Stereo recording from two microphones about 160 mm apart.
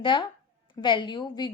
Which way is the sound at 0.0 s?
30° left (ahead or behind).